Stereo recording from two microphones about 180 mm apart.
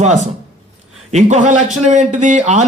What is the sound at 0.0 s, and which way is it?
Speech, 40° right (ahead or behind).